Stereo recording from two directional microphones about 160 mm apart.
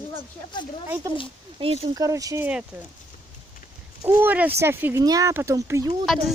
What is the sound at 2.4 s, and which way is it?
Speech, 10° right (ahead or behind).